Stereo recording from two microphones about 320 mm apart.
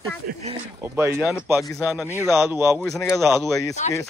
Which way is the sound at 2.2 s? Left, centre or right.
Centre.